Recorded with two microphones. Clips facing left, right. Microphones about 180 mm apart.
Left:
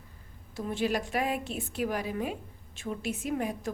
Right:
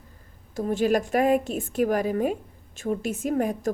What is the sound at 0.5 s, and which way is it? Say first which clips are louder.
A woman's voice: right 7 dB; 45° right (ahead or behind).